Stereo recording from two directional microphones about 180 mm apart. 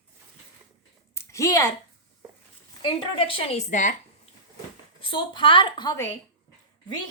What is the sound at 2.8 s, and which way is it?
A woman's voice, 30° left (ahead or behind).